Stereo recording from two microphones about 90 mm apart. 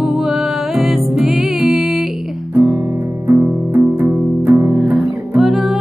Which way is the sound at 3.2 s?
30° right (ahead or behind).